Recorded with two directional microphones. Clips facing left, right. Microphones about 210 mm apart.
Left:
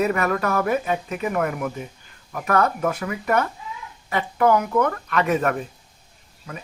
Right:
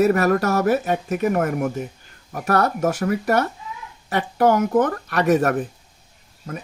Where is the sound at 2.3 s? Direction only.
35° right (ahead or behind).